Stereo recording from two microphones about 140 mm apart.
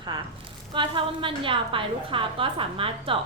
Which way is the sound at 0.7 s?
35° right (ahead or behind).